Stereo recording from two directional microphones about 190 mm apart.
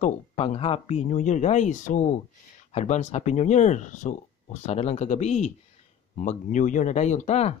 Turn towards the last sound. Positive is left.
turn(degrees=35)  # may be behind; listen again after turning